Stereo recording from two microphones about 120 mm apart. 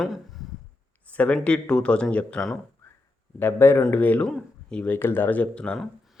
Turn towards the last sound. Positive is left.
turn(degrees=10)  # may be behind; listen again after turning